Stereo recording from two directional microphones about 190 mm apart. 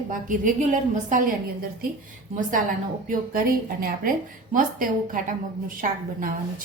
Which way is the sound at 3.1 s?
50° right (ahead or behind).